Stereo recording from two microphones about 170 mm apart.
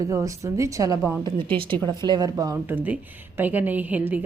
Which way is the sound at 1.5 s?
30° right (ahead or behind).